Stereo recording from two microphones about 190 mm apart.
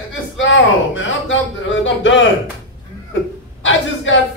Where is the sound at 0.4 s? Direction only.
80° left.